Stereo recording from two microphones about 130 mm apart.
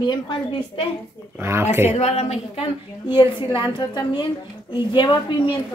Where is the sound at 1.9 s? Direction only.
55° left (ahead or behind).